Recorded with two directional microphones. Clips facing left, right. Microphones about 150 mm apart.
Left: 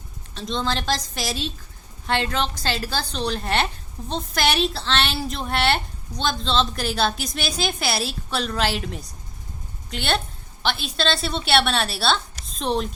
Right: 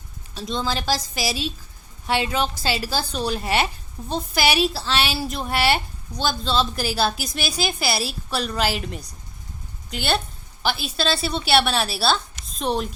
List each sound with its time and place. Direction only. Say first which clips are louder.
0.3 s a woman's voice: even; 5° right (ahead or behind)